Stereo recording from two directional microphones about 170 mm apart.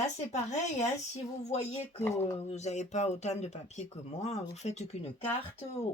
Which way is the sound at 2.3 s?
40° left (ahead or behind).